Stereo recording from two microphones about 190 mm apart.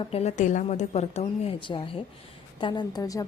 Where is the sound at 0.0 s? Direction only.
35° left (ahead or behind).